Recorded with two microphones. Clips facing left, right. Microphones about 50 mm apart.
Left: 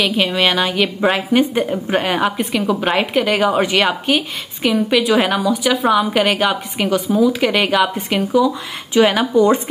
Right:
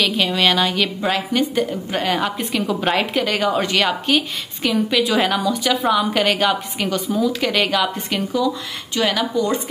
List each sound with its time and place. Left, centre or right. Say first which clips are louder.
0.0 s a woman's voice: left 2 dB; centre
1.1 s a woman's voice: left 4 dB; left
2.1 s a woman's voice: left 3 dB; centre
8.9 s a woman's voice: left 7 dB; left